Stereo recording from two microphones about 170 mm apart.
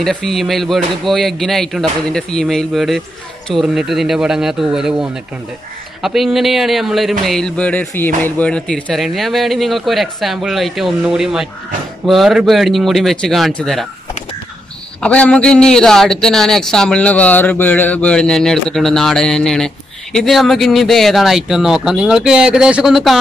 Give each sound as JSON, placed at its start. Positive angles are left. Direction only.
{"t": 0.0, "sound": "speech", "side_deg": 0}
{"t": 6.0, "sound": "speech", "side_deg": 0}
{"t": 15.0, "sound": "speech", "side_deg": 10}